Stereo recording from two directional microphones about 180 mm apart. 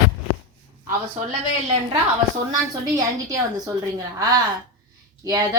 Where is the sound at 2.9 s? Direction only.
20° right (ahead or behind).